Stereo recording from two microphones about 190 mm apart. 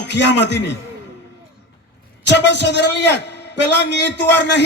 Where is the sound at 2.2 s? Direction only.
65° left (ahead or behind).